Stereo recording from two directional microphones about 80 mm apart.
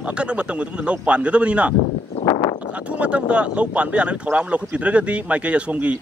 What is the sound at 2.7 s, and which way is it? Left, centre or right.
Speech, centre.